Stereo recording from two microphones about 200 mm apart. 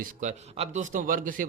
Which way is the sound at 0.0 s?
35° right (ahead or behind).